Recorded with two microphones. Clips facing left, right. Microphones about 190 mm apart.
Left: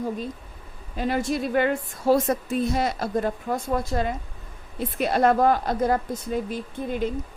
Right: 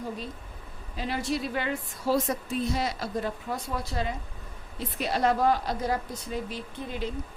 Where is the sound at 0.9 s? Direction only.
50° left (ahead or behind).